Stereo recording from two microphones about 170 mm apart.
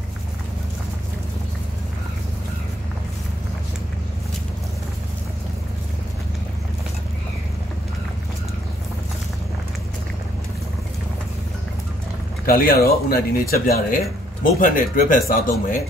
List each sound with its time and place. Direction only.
12.4 s speech: 60° left (ahead or behind)